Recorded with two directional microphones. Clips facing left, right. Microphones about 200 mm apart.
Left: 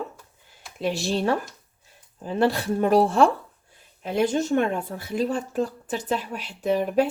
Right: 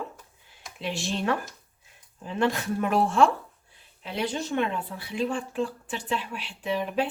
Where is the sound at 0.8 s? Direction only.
40° left (ahead or behind).